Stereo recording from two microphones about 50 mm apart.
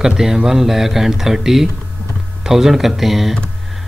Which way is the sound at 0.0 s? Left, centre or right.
Centre.